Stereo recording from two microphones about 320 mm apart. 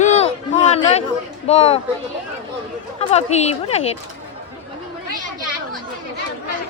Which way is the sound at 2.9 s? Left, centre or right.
Centre.